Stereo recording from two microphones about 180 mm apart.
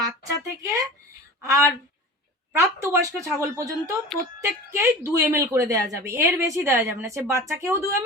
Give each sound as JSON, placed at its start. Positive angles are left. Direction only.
{"t": 0.0, "sound": "speech", "side_deg": -15}